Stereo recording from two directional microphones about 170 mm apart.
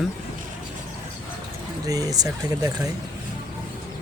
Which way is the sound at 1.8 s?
20° right (ahead or behind).